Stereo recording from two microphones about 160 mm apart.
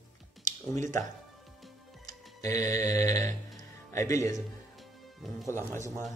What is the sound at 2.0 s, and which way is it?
Music, 20° left (ahead or behind).